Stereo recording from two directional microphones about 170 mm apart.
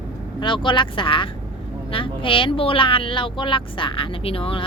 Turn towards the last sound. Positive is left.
turn(degrees=35)  # may be behind; listen again after turning